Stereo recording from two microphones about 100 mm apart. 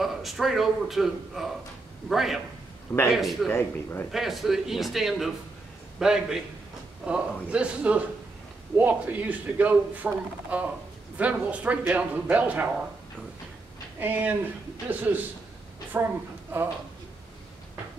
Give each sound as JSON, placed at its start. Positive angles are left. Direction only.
{"t": 0.0, "sound": "a man's voice", "side_deg": 0}
{"t": 3.4, "sound": "speech", "side_deg": 20}
{"t": 4.1, "sound": "a man's voice", "side_deg": 0}
{"t": 13.9, "sound": "a woman's voice", "side_deg": -20}